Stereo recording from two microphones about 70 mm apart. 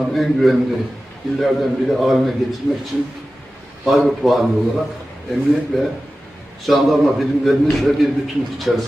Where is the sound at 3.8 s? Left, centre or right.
Centre.